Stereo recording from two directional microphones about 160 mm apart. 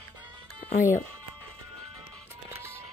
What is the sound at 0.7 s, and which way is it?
Speech, 55° left (ahead or behind).